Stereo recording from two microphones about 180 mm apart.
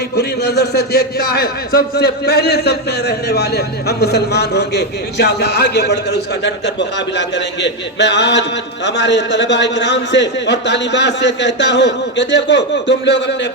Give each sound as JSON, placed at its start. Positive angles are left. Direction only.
{"t": 0.2, "sound": "a man's voice", "side_deg": 65}